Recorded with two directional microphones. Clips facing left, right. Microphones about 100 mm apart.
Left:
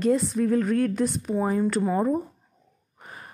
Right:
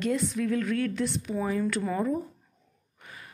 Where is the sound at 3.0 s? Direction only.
40° left (ahead or behind).